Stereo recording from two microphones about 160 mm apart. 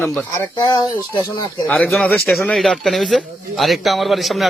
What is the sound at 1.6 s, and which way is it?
Speech, 10° left (ahead or behind).